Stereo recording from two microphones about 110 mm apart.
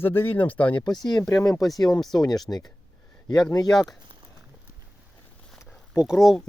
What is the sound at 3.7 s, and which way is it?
Speech, centre (ahead or behind).